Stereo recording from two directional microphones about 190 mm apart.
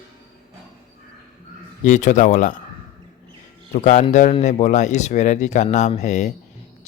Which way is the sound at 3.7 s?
40° left (ahead or behind).